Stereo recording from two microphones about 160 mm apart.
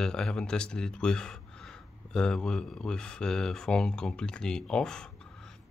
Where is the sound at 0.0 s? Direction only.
5° left (ahead or behind).